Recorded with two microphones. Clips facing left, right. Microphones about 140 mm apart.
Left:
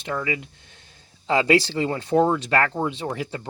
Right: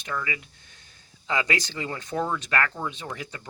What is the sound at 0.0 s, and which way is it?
Speech, 30° left (ahead or behind).